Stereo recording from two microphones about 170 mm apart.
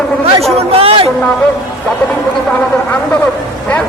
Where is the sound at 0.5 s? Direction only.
35° right (ahead or behind).